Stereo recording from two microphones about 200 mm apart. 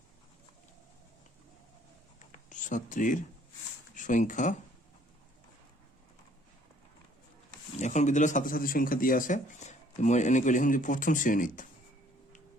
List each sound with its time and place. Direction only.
2.1 s a sound: 40° left (ahead or behind)
3.9 s speech: 40° left (ahead or behind)
7.8 s speech: 35° left (ahead or behind)